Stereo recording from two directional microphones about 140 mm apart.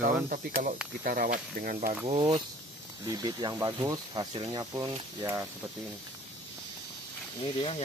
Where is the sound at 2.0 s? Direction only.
35° right (ahead or behind); by 5.5 s 20° right (ahead or behind).